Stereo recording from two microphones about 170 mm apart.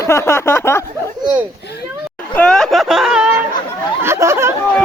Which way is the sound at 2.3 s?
5° left (ahead or behind).